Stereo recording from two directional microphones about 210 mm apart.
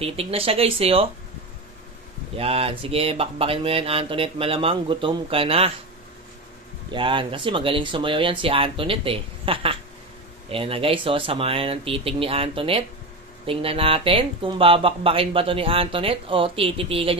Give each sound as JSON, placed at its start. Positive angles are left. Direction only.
{"t": 0.0, "sound": "speech", "side_deg": -30}
{"t": 2.3, "sound": "speech", "side_deg": -25}
{"t": 6.9, "sound": "speech", "side_deg": -25}